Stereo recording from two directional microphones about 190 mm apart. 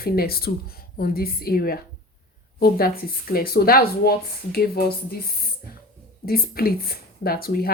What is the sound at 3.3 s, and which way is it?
Speech, 50° left (ahead or behind).